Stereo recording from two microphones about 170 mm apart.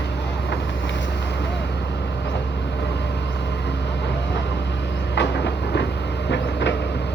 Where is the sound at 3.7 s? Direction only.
90° left.